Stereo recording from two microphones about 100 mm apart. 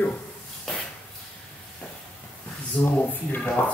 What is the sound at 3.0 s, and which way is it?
Speech, 20° left (ahead or behind).